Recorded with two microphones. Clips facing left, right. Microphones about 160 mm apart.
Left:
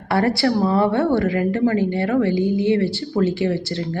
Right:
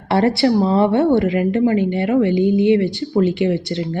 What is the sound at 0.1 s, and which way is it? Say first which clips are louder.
A woman's voice: right 3 dB; 25° right (ahead or behind).